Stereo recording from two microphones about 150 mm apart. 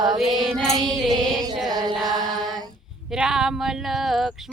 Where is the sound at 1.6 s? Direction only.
25° right (ahead or behind).